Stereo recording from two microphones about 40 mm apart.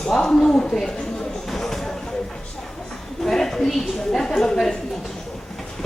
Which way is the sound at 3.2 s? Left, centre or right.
Centre.